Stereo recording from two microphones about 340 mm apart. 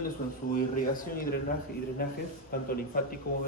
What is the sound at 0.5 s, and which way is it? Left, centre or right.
Speech, left.